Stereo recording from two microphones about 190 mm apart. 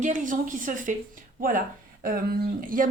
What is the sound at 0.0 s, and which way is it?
Speech, 40° right (ahead or behind).